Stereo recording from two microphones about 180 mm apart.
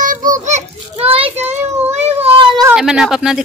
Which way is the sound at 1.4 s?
10° right (ahead or behind).